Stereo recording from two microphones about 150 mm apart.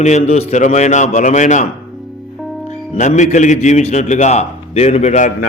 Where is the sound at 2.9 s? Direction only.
55° left (ahead or behind).